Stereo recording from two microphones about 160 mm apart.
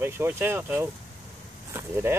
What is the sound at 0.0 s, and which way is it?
Speech, 15° right (ahead or behind).